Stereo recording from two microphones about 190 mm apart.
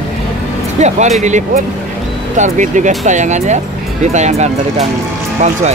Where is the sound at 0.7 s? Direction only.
35° right (ahead or behind).